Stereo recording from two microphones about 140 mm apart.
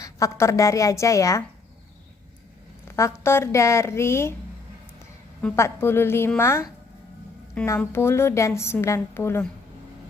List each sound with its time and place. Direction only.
0.0 s a woman's voice: 20° left (ahead or behind)
2.8 s a woman's voice: 20° left (ahead or behind)
5.5 s a woman's voice: 20° left (ahead or behind)
7.8 s a woman's voice: 15° left (ahead or behind)